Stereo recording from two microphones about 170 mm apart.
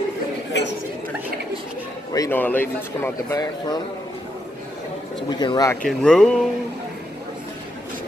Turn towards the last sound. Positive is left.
turn(degrees=5)  # may be behind; listen again after turning